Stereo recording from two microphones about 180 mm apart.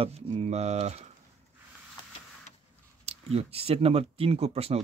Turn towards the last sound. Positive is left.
turn(degrees=-35)  # may be behind; listen again after turning